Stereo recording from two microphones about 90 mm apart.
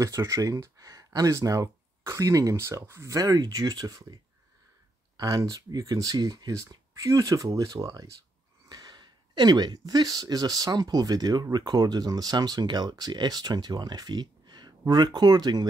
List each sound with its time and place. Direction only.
0.0 s speech: 35° right (ahead or behind); by 15.7 s 50° right (ahead or behind)